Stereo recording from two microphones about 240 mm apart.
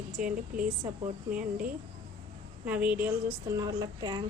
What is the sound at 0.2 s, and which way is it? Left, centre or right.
Speech, right.